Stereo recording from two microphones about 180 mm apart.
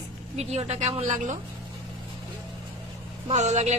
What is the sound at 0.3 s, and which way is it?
A woman's voice, 35° right (ahead or behind).